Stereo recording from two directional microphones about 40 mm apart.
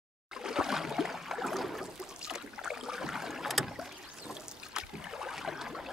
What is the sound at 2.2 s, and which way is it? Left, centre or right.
Boat, centre.